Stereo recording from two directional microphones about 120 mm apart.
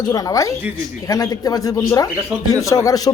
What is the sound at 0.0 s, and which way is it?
A man's voice, 30° left (ahead or behind).